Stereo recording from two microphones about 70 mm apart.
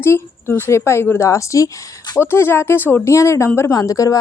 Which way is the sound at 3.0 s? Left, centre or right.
Left.